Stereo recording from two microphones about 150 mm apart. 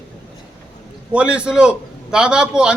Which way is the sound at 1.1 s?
10° right (ahead or behind).